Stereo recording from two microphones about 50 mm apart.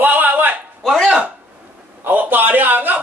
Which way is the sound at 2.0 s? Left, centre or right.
Right.